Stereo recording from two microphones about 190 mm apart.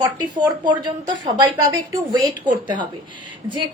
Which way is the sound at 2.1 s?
25° right (ahead or behind).